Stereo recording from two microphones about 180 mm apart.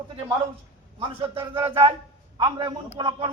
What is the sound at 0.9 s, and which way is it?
A man's voice, 30° right (ahead or behind).